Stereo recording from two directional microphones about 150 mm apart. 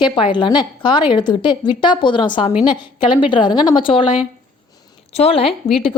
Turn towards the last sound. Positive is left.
turn(degrees=40)  # may be behind; listen again after turning